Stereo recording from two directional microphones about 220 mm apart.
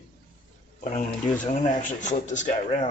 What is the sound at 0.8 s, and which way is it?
Speech, 30° left (ahead or behind).